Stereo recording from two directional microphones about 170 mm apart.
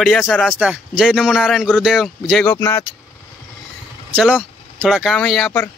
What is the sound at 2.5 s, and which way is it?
Speech, 20° left (ahead or behind).